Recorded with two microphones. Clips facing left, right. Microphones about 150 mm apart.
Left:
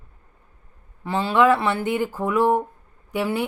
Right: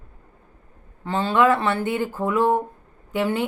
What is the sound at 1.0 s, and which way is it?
Speech, 15° left (ahead or behind).